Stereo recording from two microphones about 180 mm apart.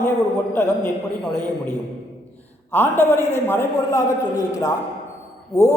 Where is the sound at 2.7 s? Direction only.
10° left (ahead or behind).